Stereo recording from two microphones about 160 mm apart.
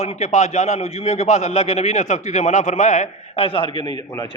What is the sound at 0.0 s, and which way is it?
A man's voice, 45° left (ahead or behind).